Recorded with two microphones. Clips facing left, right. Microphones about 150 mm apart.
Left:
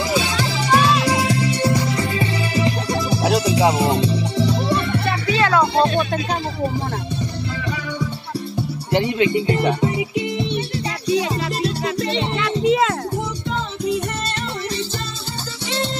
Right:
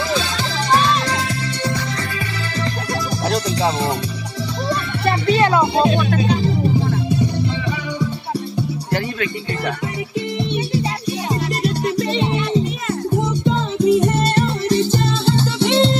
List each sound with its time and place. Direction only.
0.7 s music: 10° left (ahead or behind)
5.3 s music: 20° right (ahead or behind)
8.9 s speech: 20° left (ahead or behind)
12.4 s music: 90° left
13.5 s music: 25° right (ahead or behind)
14.3 s music: 50° right (ahead or behind)
15.2 s music: 65° right (ahead or behind)